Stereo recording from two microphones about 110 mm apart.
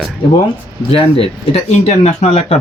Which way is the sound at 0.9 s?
60° left (ahead or behind).